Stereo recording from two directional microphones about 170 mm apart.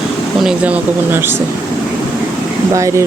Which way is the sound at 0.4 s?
10° right (ahead or behind).